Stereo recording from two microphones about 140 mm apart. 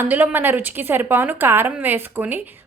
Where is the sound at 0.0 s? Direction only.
15° right (ahead or behind).